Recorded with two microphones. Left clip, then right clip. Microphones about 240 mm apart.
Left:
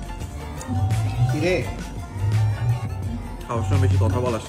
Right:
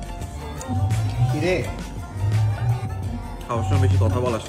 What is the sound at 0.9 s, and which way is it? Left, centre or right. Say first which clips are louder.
Music: even; centre.